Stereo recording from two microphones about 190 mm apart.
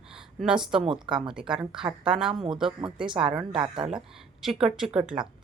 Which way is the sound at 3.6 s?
25° right (ahead or behind).